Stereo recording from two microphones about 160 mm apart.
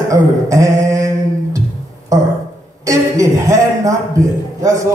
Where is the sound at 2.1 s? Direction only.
20° right (ahead or behind).